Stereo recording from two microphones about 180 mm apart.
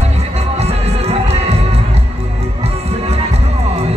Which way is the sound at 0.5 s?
35° right (ahead or behind).